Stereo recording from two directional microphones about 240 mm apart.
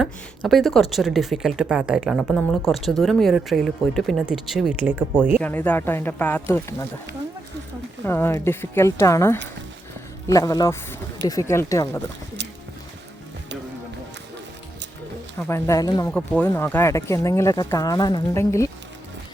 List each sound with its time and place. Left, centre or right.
0.0 s speech: centre
5.4 s speech: centre
8.0 s speech: centre
12.4 s clip-clop: right
15.4 s speech: centre